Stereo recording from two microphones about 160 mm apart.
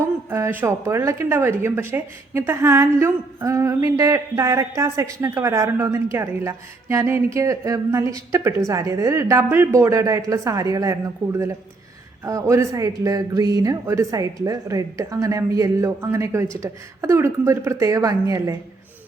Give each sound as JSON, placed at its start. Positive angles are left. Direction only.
{"t": 0.3, "sound": "a woman's voice", "side_deg": -15}